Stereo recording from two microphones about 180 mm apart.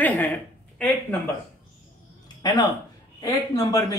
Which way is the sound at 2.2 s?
20° left (ahead or behind).